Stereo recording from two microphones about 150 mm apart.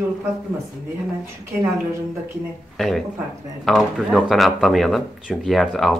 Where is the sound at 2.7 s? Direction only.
Centre (ahead or behind).